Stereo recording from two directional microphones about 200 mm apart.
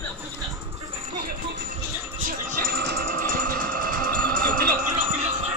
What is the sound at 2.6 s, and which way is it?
Music, 55° right (ahead or behind).